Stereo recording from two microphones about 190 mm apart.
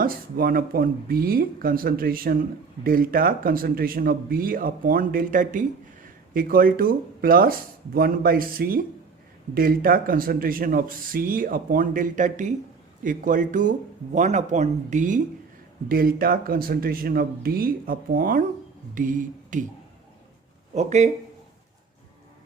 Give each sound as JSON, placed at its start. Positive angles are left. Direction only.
{"t": 0.0, "sound": "speech", "side_deg": -50}
{"t": 20.7, "sound": "speech", "side_deg": -35}